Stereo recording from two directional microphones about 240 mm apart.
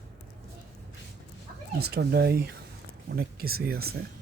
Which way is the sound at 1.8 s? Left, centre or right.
Right.